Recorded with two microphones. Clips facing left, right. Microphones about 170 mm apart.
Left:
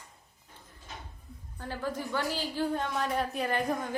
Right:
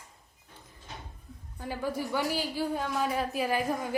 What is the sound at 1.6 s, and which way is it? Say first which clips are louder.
A woman's voice: right 2 dB; 10° right (ahead or behind).